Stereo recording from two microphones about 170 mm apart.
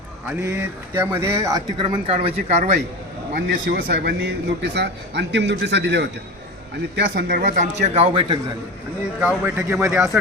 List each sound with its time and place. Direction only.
0.6 s speech: 15° right (ahead or behind)
1.8 s speech: 30° right (ahead or behind)
3.5 s a man's voice: 75° right (ahead or behind); by 8.4 s 30° right (ahead or behind)
9.2 s speech: 10° right (ahead or behind)